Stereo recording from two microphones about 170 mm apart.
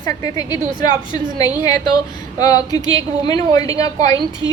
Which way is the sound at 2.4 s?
25° left (ahead or behind).